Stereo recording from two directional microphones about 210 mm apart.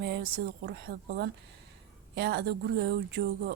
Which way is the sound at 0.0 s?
50° right (ahead or behind).